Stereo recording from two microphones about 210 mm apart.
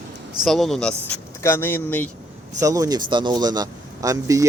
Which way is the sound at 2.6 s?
15° right (ahead or behind).